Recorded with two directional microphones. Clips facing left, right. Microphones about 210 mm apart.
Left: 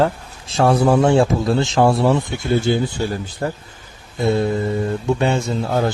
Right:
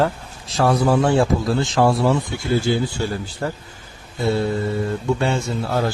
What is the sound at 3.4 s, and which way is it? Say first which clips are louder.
Speech: left 2 dB; 30° left (ahead or behind).